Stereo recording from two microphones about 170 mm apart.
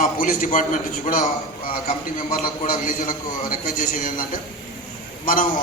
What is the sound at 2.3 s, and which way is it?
A man's voice, 55° left (ahead or behind).